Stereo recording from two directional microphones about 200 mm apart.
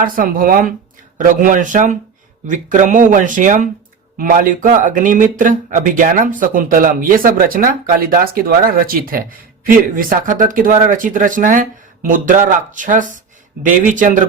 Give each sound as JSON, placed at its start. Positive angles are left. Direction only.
{"t": 0.0, "sound": "speech", "side_deg": -45}